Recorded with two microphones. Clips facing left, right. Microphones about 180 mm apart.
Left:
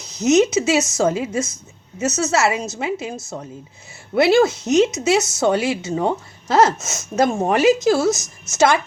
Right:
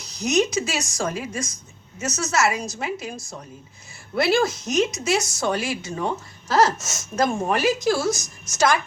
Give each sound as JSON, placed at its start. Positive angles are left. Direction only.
{"t": 0.0, "sound": "speech", "side_deg": 25}